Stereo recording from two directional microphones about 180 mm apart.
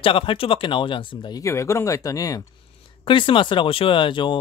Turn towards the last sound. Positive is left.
turn(degrees=25)  # may be behind; listen again after turning